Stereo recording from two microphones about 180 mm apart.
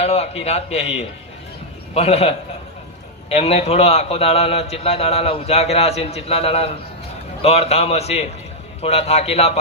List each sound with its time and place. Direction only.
0.0 s a man's voice: 35° left (ahead or behind)